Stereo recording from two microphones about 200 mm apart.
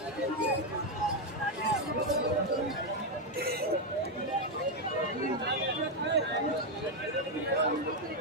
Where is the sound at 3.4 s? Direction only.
50° right (ahead or behind).